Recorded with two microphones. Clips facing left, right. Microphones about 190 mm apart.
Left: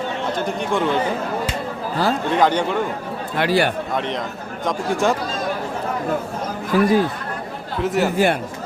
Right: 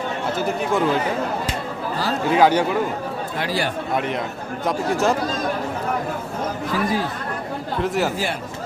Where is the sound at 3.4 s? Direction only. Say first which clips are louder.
Left 7 dB; 65° left (ahead or behind).